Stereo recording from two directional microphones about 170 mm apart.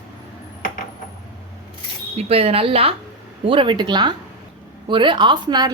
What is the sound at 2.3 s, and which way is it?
A woman's voice, 35° right (ahead or behind).